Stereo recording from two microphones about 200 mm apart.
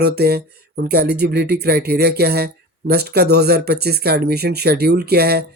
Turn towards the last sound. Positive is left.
turn(degrees=-50)  # may be behind; listen again after turning